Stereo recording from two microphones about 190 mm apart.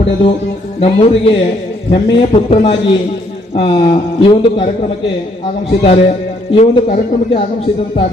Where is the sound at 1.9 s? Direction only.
30° left (ahead or behind).